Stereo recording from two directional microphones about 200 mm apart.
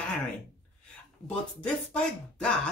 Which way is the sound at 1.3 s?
5° left (ahead or behind).